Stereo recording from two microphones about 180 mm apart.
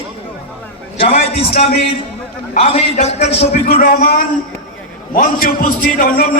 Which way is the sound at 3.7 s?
55° left (ahead or behind).